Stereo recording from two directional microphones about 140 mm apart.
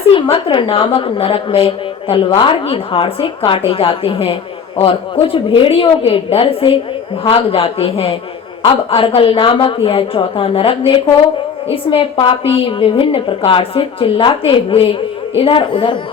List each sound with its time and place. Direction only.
0.1 s a woman's voice: 40° left (ahead or behind)